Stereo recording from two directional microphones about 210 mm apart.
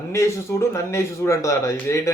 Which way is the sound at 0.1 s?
15° left (ahead or behind).